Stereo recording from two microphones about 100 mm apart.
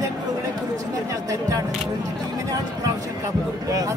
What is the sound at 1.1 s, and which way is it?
Speech, 35° right (ahead or behind).